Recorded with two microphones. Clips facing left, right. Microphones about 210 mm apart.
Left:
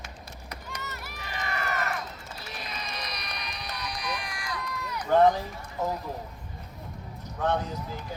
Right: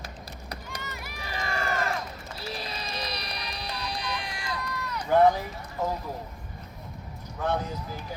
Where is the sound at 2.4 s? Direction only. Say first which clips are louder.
Right 5 dB; 30° right (ahead or behind).